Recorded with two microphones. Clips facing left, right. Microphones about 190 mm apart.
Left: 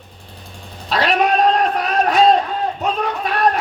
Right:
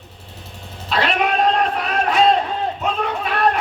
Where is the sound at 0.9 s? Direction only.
40° left (ahead or behind).